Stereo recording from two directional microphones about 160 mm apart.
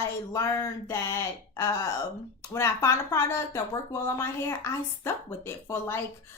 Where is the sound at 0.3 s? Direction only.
20° left (ahead or behind).